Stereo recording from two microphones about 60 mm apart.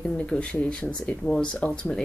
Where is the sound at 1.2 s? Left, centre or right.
Left.